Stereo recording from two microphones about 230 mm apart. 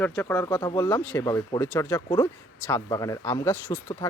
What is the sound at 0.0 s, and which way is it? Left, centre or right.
Speech, centre.